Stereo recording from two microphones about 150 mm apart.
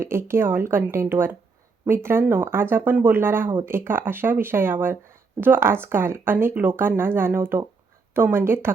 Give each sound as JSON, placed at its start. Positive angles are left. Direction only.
{"t": 0.0, "sound": "speech", "side_deg": -15}